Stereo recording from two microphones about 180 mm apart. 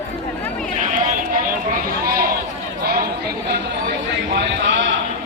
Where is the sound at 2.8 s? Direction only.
55° right (ahead or behind).